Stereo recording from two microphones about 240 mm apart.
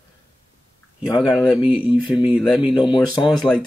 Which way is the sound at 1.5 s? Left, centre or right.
Centre.